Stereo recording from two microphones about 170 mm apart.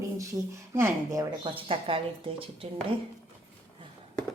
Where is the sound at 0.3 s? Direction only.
15° right (ahead or behind).